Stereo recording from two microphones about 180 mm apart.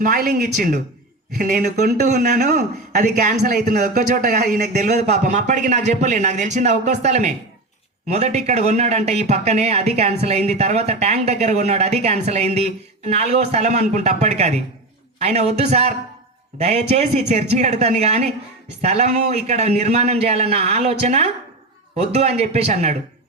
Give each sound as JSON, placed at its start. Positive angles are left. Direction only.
{"t": 0.0, "sound": "speech", "side_deg": -50}
{"t": 2.0, "sound": "speech", "side_deg": -45}
{"t": 4.8, "sound": "speech", "side_deg": -40}